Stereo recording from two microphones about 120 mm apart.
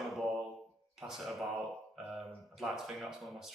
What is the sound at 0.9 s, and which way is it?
Speech, 5° right (ahead or behind).